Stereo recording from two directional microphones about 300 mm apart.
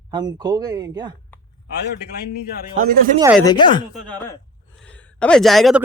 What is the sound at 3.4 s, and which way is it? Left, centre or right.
Speech, centre.